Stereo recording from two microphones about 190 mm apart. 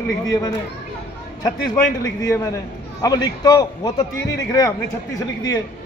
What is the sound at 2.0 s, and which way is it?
A man's voice, 15° left (ahead or behind).